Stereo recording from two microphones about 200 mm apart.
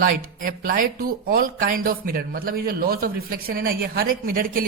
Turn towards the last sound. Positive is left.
turn(degrees=-45)  # may be behind; listen again after turning